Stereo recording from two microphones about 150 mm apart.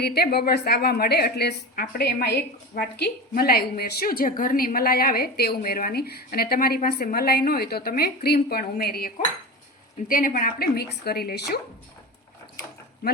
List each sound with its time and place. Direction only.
0.0 s a woman's voice: 90° left
10.1 s a woman's voice: 65° left (ahead or behind); by 11.6 s 90° left